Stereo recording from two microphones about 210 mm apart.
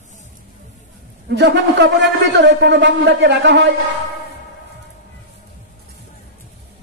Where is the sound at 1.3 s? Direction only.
55° right (ahead or behind).